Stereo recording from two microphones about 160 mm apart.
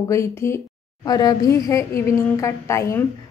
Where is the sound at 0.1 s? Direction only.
15° left (ahead or behind).